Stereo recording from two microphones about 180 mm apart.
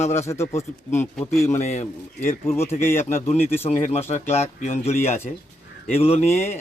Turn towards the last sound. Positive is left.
turn(degrees=35)  # may be behind; listen again after turning